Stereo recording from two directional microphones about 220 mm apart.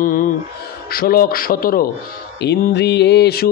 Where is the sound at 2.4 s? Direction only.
50° left (ahead or behind).